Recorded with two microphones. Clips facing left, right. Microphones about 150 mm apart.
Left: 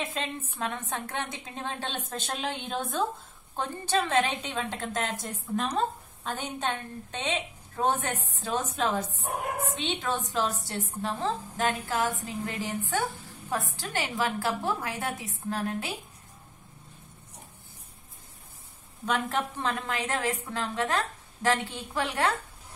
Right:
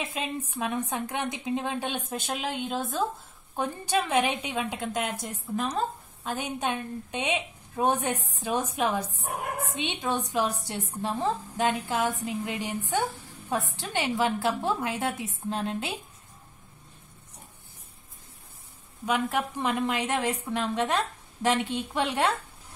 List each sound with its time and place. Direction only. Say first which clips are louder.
0.2 s a woman's voice: right 2 dB; 10° right (ahead or behind)
19.0 s a woman's voice: right 2 dB; 10° right (ahead or behind)